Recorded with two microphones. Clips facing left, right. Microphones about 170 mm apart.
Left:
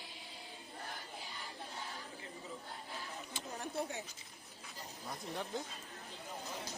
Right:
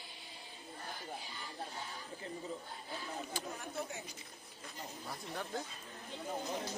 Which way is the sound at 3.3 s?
35° left (ahead or behind).